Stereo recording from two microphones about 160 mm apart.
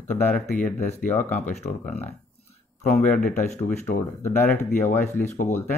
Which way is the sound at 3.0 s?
55° left (ahead or behind).